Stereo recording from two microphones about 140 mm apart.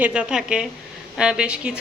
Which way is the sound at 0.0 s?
5° right (ahead or behind).